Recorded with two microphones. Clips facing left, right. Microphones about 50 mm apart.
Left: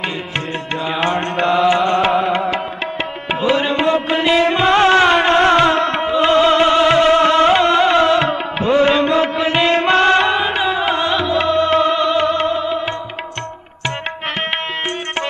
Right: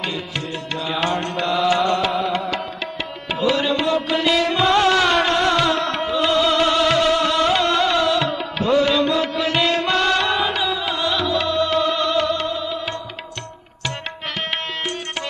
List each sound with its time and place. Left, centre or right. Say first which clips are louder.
0.8 s music: left 3 dB; left